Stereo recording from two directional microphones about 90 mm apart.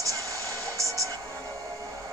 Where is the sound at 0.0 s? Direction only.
40° right (ahead or behind).